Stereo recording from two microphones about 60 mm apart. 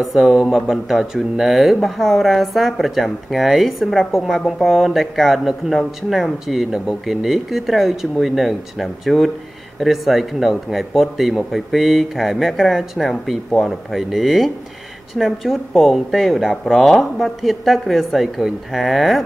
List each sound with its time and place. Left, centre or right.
0.0 s speech: centre